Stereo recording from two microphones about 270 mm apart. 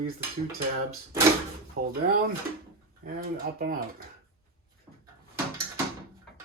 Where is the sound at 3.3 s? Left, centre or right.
Right.